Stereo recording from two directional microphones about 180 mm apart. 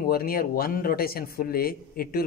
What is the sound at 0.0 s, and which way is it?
A man's voice, 55° left (ahead or behind).